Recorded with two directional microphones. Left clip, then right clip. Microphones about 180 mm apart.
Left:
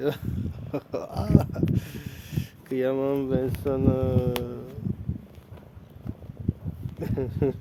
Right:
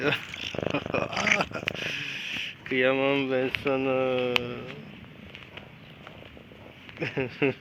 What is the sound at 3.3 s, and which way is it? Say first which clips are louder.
Speech: right 1 dB; 20° left (ahead or behind).